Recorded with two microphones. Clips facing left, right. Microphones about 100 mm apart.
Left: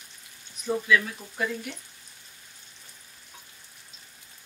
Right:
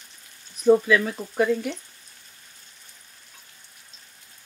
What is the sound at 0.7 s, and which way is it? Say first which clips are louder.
Speech: right 7 dB; 45° right (ahead or behind).